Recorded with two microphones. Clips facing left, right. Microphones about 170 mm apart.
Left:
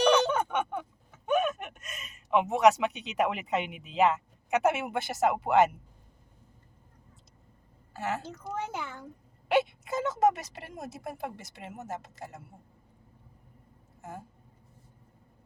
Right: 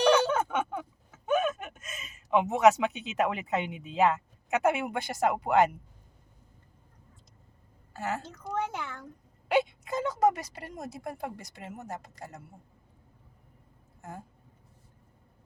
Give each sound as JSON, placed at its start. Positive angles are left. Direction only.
{"t": 0.1, "sound": "a sound", "side_deg": -5}
{"t": 7.9, "sound": "speech", "side_deg": 0}
{"t": 14.0, "sound": "speech", "side_deg": 0}